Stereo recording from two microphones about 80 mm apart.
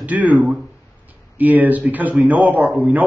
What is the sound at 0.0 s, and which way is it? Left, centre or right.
A man's voice, centre.